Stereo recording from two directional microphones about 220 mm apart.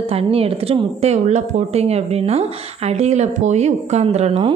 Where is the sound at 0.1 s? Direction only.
25° right (ahead or behind).